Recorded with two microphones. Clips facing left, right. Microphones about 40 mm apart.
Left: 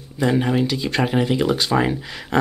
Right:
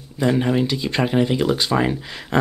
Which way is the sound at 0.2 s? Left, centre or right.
Centre.